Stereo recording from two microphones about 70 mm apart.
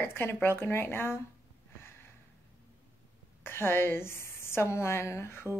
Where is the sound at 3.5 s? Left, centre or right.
Left.